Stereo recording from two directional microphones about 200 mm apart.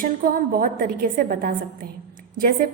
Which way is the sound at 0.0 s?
45° right (ahead or behind).